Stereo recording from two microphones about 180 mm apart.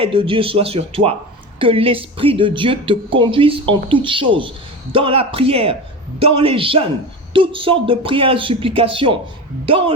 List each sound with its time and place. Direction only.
0.0 s speech: 30° right (ahead or behind)